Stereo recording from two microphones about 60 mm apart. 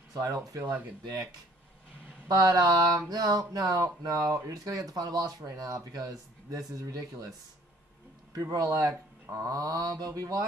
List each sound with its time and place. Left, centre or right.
0.1 s speech: right
0.5 s speech: right
2.2 s speech: right
8.4 s speech: right
9.5 s speech: right